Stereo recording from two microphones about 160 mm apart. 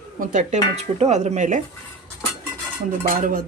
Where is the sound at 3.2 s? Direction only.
60° right (ahead or behind).